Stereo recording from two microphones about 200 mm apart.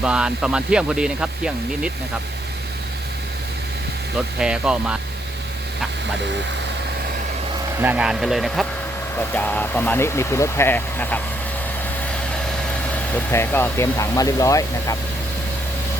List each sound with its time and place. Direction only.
0.0 s speech: 5° right (ahead or behind)
4.4 s speech: 5° right (ahead or behind)
7.8 s speech: 5° right (ahead or behind); by 11.2 s 10° left (ahead or behind)
13.1 s speech: 10° left (ahead or behind)